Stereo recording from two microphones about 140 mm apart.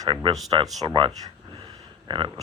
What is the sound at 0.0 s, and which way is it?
Speech, 30° right (ahead or behind).